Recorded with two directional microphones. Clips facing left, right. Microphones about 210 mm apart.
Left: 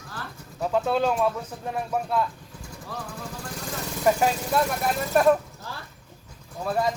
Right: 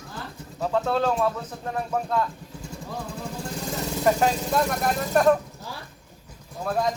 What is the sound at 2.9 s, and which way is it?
Speech, 25° right (ahead or behind).